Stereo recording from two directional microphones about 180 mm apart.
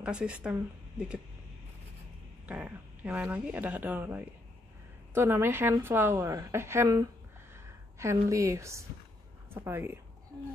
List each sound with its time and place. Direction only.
0.0 s speech: 5° right (ahead or behind)
2.4 s a woman's voice: 5° right (ahead or behind)